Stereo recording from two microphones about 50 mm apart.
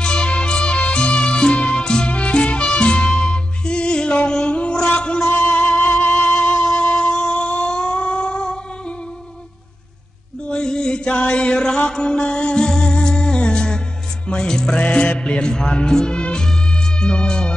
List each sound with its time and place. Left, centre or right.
0.0 s music: centre
10.5 s chant: centre
11.9 s music: centre